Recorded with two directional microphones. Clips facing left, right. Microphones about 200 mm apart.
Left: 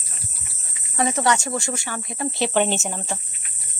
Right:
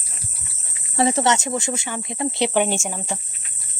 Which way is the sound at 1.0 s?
30° right (ahead or behind).